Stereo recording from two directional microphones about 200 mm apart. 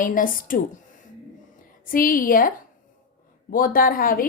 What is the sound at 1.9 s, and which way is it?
A woman's voice, 45° left (ahead or behind).